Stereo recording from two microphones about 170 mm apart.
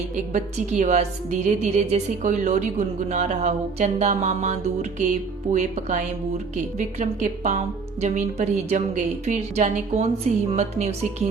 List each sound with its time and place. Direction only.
0.3 s a woman's voice: 45° right (ahead or behind)